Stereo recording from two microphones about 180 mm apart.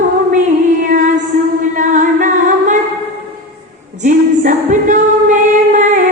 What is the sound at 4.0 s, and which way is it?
Singing, 45° right (ahead or behind).